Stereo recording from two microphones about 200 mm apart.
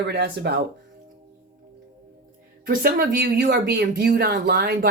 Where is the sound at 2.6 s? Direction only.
45° right (ahead or behind).